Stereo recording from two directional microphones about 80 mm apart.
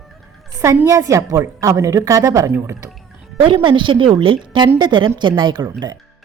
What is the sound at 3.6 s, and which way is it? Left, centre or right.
A woman's voice, right.